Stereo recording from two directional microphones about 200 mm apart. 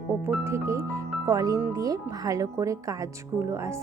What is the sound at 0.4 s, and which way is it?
Speech, 15° right (ahead or behind).